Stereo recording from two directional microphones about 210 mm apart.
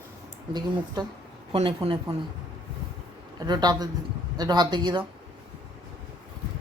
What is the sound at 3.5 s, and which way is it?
A woman's voice, 20° right (ahead or behind).